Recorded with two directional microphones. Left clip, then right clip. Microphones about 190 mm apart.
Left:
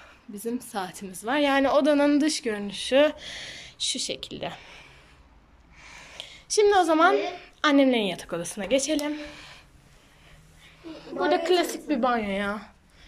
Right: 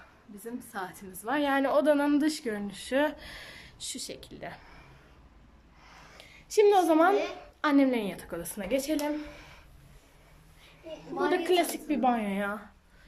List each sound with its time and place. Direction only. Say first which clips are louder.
0.5 s a woman's voice: left 6 dB; 10° left (ahead or behind); by 9.6 s 10° right (ahead or behind)
11.2 s a woman's voice: left 4 dB; 15° right (ahead or behind)